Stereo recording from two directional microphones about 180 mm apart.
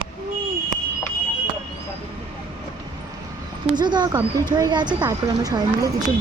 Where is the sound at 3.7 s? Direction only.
25° right (ahead or behind).